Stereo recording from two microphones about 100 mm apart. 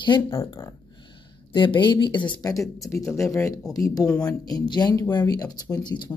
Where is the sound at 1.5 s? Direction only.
55° left (ahead or behind).